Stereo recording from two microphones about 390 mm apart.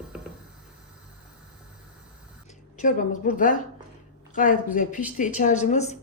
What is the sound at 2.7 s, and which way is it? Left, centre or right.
Speech, centre.